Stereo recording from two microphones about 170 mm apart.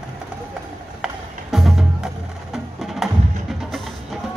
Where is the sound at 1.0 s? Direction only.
Centre (ahead or behind).